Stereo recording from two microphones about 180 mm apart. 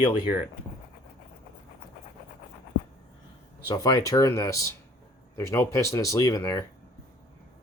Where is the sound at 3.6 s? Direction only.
20° left (ahead or behind).